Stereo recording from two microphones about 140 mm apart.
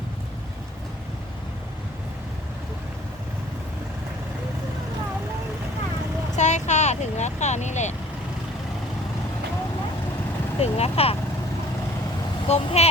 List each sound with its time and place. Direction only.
6.3 s vehicle: 55° left (ahead or behind)
10.6 s speech: 45° left (ahead or behind)
12.5 s speech: 50° left (ahead or behind)